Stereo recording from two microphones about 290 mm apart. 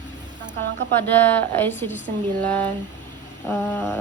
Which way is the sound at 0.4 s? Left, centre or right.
Right.